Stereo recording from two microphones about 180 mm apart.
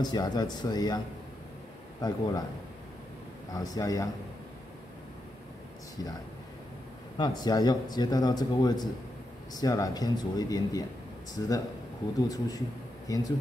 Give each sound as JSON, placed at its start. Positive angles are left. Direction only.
{"t": 0.0, "sound": "speech", "side_deg": 20}
{"t": 3.5, "sound": "speech", "side_deg": 20}
{"t": 7.2, "sound": "speech", "side_deg": 20}